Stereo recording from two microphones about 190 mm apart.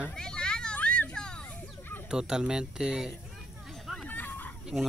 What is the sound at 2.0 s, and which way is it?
Speech, 5° right (ahead or behind).